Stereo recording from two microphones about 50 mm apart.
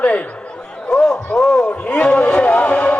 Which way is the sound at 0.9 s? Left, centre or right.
Centre.